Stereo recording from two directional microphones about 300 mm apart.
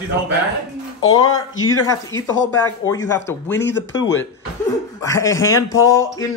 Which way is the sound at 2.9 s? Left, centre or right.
Centre.